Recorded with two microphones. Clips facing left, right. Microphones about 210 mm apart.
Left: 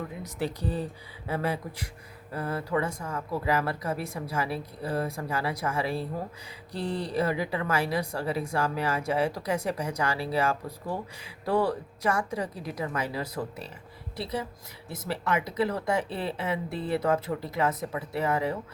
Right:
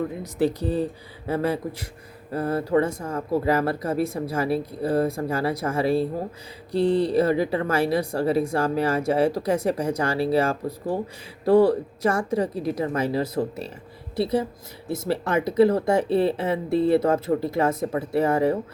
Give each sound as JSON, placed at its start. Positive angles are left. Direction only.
{"t": 0.0, "sound": "speech", "side_deg": -35}
{"t": 15.4, "sound": "speech", "side_deg": -40}
{"t": 16.4, "sound": "speech", "side_deg": -30}
{"t": 17.0, "sound": "speech", "side_deg": -45}